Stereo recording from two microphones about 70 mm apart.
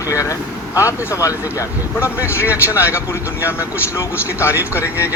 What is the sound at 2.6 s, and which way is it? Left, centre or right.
Speech, left.